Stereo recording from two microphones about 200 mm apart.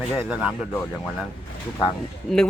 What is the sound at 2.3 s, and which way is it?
Speech, centre (ahead or behind).